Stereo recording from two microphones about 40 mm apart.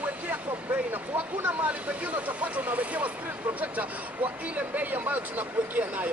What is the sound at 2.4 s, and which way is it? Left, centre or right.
Vehicle, right.